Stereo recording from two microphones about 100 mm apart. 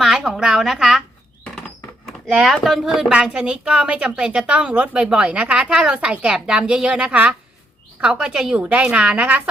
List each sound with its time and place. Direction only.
0.0 s a woman's voice: 5° right (ahead or behind)
2.2 s speech: 5° right (ahead or behind)